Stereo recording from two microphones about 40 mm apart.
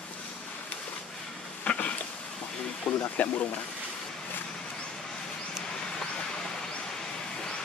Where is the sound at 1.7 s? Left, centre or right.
Left.